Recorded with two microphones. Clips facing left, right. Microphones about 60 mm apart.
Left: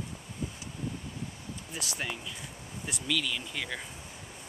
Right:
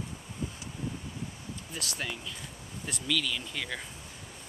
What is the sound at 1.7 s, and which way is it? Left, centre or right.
Speech, centre.